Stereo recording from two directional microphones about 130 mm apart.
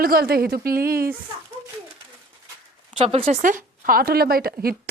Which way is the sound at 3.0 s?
50° right (ahead or behind).